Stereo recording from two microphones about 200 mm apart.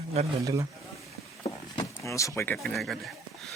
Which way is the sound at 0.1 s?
30° right (ahead or behind).